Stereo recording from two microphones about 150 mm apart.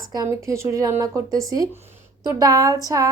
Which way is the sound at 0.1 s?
20° right (ahead or behind).